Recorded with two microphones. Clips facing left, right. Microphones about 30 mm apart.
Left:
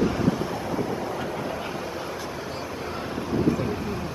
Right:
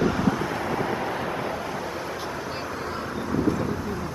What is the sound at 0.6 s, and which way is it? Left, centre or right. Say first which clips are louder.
Vehicle: right 2 dB; right.